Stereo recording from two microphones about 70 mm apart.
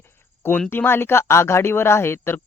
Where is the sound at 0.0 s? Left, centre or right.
Left.